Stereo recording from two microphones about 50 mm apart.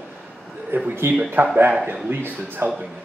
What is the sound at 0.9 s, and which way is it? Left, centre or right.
Speech, right.